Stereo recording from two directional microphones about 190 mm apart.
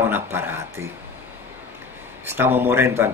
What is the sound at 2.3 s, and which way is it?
Speech, 10° right (ahead or behind).